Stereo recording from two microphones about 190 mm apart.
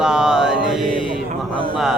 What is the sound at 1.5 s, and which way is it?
Speech, 25° left (ahead or behind).